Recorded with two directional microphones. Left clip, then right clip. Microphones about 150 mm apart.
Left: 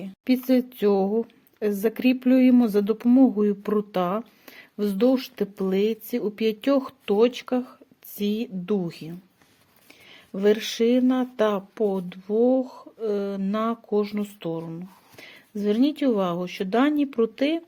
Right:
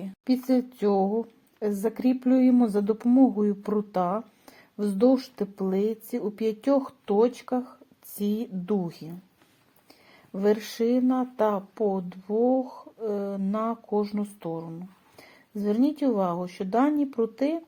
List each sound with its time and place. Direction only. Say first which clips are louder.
0.3 s speech: left 3 dB; 25° left (ahead or behind)
10.3 s speech: left 3 dB; 30° left (ahead or behind)